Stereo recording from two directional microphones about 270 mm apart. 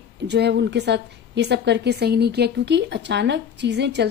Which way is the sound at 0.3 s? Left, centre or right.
Right.